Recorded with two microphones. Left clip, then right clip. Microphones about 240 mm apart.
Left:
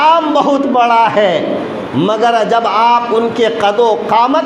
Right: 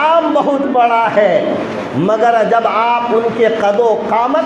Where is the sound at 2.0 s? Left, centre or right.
Left.